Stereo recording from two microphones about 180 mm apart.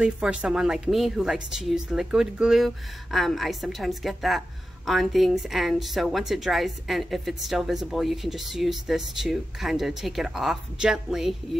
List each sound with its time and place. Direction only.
0.0 s a woman's voice: 5° right (ahead or behind)